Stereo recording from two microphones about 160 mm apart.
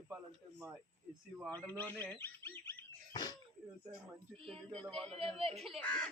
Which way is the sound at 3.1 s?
25° left (ahead or behind).